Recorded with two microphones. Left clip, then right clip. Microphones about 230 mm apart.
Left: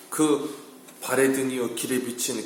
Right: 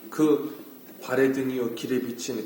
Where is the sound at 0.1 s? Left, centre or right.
Centre.